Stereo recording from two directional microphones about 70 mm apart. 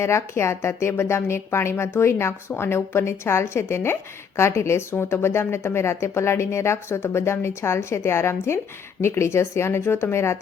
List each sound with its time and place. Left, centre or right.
0.0 s speech: left